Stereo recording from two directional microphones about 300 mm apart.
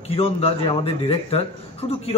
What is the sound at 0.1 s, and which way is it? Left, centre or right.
A man's voice, centre.